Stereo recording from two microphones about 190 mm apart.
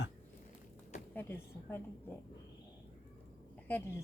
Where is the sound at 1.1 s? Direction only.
10° left (ahead or behind).